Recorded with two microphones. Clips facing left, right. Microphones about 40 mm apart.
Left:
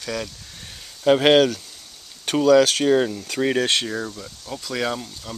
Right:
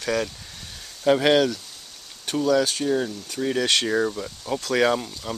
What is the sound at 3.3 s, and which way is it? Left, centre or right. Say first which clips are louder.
Speech: left 3 dB; left.